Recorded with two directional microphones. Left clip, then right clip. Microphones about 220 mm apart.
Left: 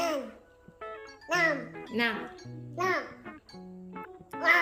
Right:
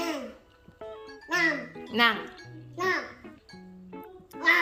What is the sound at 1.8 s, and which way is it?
Speech, 5° left (ahead or behind).